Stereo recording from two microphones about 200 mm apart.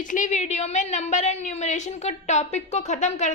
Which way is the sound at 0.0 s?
40° left (ahead or behind).